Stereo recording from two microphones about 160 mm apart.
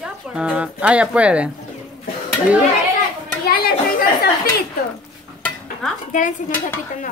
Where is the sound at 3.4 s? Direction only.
70° left (ahead or behind).